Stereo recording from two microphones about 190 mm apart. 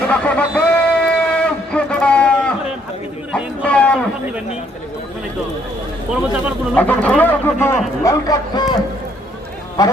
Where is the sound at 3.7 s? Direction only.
5° left (ahead or behind).